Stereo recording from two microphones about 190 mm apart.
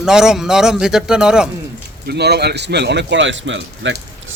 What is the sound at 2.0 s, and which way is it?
A man's voice, 60° right (ahead or behind).